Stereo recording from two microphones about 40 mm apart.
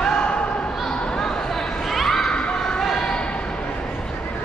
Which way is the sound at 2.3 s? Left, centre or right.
Left.